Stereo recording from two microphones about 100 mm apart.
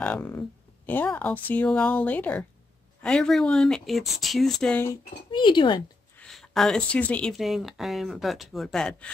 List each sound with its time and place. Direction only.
0.0 s speech: 15° left (ahead or behind)
5.3 s speech: 50° left (ahead or behind)
6.1 s speech: 5° left (ahead or behind)
7.3 s speech: centre (ahead or behind)